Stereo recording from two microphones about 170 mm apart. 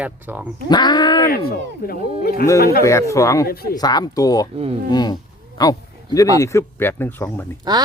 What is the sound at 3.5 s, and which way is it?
Speech, 60° left (ahead or behind).